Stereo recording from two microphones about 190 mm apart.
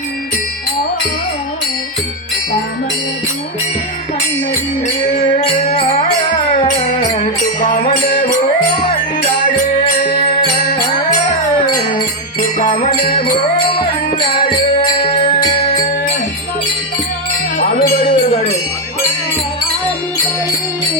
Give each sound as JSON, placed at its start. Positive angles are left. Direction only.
{"t": 5.4, "sound": "music", "side_deg": 30}
{"t": 7.6, "sound": "music", "side_deg": 40}
{"t": 14.8, "sound": "music", "side_deg": 30}
{"t": 17.6, "sound": "wind chime", "side_deg": 55}
{"t": 18.1, "sound": "music", "side_deg": 30}